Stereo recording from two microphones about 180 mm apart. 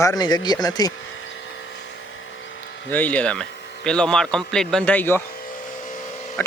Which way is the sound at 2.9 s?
10° left (ahead or behind).